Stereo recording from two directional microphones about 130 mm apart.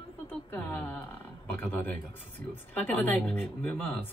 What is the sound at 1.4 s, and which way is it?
Speech, 15° left (ahead or behind).